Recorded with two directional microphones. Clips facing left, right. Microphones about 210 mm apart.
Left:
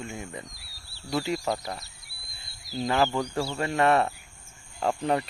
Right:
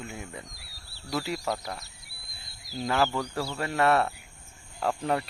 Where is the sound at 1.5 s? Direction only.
10° left (ahead or behind).